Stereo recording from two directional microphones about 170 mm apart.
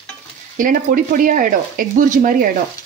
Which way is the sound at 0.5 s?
55° right (ahead or behind).